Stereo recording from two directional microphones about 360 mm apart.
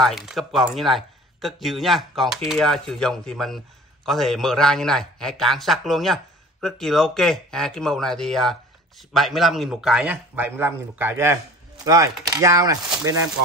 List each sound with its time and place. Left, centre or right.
0.0 s speech: centre